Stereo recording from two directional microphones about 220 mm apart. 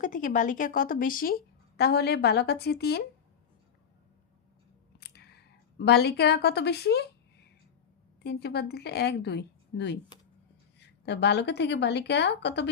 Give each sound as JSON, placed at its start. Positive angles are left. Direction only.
{"t": 0.0, "sound": "a woman's voice", "side_deg": 35}
{"t": 4.9, "sound": "a sound", "side_deg": 45}
{"t": 5.8, "sound": "a woman's voice", "side_deg": 45}
{"t": 8.2, "sound": "a woman's voice", "side_deg": 50}